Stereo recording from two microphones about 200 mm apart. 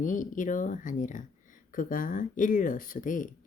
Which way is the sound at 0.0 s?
40° left (ahead or behind).